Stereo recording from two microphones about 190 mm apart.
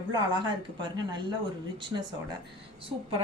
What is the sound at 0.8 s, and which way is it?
Speech, 25° right (ahead or behind).